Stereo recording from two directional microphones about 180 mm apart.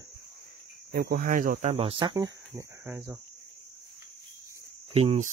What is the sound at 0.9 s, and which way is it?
Speech, 50° right (ahead or behind).